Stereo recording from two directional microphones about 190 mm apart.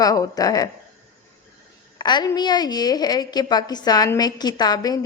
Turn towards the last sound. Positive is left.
turn(degrees=20)  # may be behind; listen again after turning